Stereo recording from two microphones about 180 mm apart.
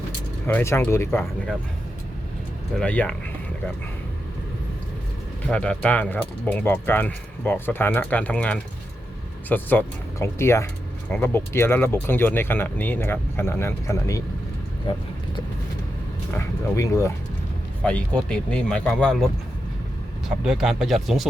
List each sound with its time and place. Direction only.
0.4 s speech: 15° left (ahead or behind)
2.7 s speech: 5° left (ahead or behind)
5.5 s speech: 5° left (ahead or behind)
16.3 s speech: 15° left (ahead or behind); by 21.2 s centre (ahead or behind)